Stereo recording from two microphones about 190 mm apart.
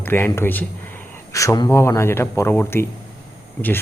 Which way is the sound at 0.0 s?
10° left (ahead or behind).